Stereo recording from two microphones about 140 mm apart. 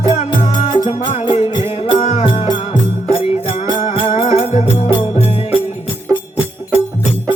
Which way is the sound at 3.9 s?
40° left (ahead or behind).